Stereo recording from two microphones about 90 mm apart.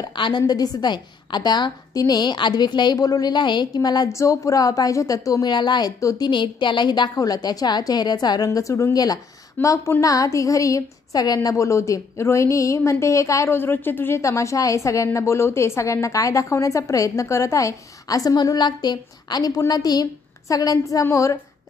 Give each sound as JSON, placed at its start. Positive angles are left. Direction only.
{"t": 0.0, "sound": "a woman's voice", "side_deg": 55}
{"t": 0.4, "sound": "a woman's voice", "side_deg": 45}
{"t": 4.1, "sound": "a woman's voice", "side_deg": 35}
{"t": 5.5, "sound": "a woman's voice", "side_deg": 55}
{"t": 8.5, "sound": "a woman's voice", "side_deg": 35}
{"t": 14.2, "sound": "a woman's voice", "side_deg": 35}